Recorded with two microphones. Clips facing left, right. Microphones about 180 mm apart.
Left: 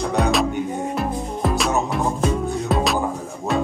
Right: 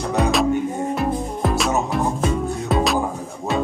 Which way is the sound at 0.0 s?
Centre (ahead or behind).